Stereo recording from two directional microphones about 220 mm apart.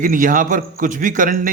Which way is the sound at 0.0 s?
35° right (ahead or behind).